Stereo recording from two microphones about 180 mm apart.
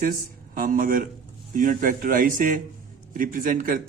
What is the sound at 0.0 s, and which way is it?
Speech, 50° right (ahead or behind).